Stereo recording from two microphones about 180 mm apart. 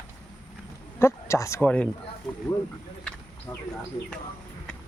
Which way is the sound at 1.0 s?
15° left (ahead or behind).